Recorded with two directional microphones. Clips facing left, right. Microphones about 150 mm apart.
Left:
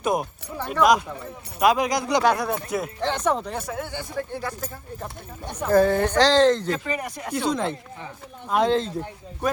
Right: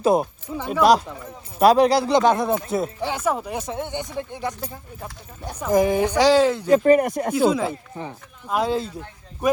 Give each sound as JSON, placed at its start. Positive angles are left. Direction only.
{"t": 0.0, "sound": "speech", "side_deg": -30}
{"t": 3.0, "sound": "speech", "side_deg": -10}
{"t": 3.6, "sound": "speech", "side_deg": -20}
{"t": 6.8, "sound": "speech", "side_deg": -50}
{"t": 7.3, "sound": "speech", "side_deg": -5}